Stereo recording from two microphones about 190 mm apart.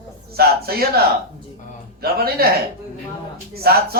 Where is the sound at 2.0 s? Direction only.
55° right (ahead or behind).